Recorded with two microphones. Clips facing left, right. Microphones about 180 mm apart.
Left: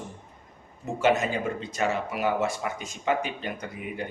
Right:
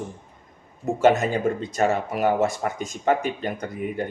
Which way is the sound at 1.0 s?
45° right (ahead or behind).